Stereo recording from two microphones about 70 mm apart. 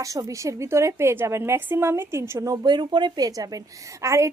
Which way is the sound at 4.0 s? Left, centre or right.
Right.